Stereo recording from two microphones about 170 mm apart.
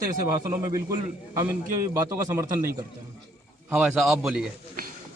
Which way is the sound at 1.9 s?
15° right (ahead or behind).